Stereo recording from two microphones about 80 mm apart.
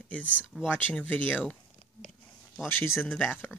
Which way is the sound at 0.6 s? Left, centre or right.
Left.